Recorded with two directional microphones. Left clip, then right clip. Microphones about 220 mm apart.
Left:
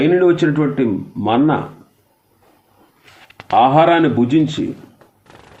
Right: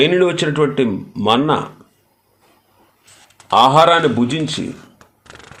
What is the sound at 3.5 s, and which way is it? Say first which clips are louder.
Speech: right 1 dB; 50° right (ahead or behind).